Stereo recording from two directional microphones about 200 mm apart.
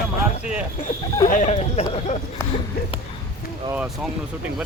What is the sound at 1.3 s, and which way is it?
Speech, 40° left (ahead or behind).